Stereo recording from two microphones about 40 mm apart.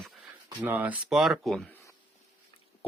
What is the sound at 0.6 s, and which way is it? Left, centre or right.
Speech, right.